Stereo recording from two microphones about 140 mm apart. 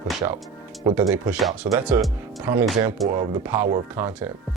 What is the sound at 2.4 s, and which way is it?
Speech, 10° right (ahead or behind).